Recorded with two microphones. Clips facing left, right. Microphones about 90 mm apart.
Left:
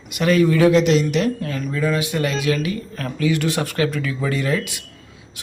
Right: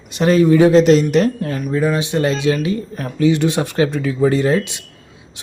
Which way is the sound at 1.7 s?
25° right (ahead or behind).